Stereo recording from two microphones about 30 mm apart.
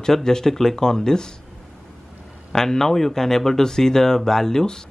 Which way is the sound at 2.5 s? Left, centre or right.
Centre.